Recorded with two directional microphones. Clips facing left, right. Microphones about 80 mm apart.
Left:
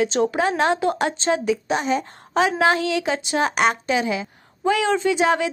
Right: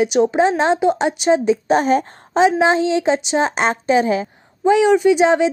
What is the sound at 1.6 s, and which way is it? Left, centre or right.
Speech, right.